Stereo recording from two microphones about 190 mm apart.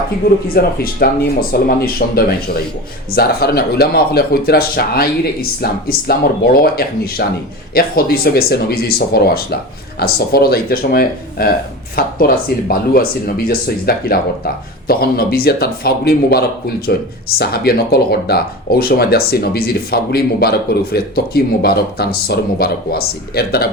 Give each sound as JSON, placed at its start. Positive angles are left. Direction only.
{"t": 0.4, "sound": "speech", "side_deg": 50}